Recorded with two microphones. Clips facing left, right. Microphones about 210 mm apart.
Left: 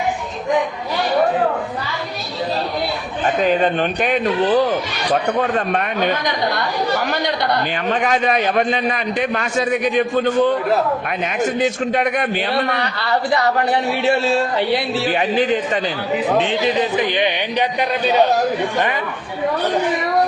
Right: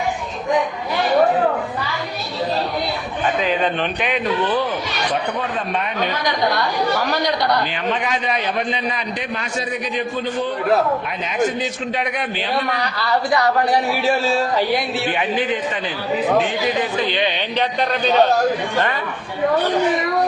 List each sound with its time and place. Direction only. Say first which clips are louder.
3.4 s a man's voice: left 7 dB; 45° left (ahead or behind)
8.0 s a man's voice: left 5 dB; 50° left (ahead or behind)
11.6 s a man's voice: left 6 dB; 50° left (ahead or behind)
14.9 s a man's voice: left 3 dB; 35° left (ahead or behind)
16.5 s speech: left 3 dB; 20° left (ahead or behind)